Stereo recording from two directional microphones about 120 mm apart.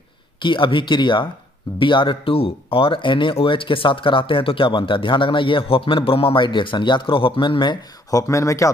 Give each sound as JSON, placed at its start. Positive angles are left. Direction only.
{"t": 0.4, "sound": "speech", "side_deg": 45}
{"t": 8.1, "sound": "speech", "side_deg": 25}